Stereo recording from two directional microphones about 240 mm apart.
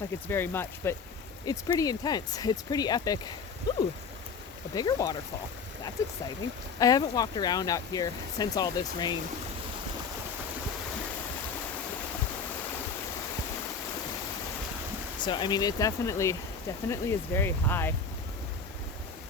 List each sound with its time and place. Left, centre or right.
0.3 s speech: centre
6.7 s speech: centre
15.2 s speech: centre